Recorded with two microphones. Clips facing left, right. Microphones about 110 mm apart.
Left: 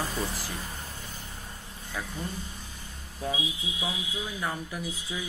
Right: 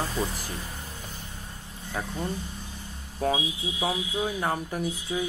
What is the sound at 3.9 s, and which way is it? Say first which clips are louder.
Speech: right 8 dB; 60° right (ahead or behind).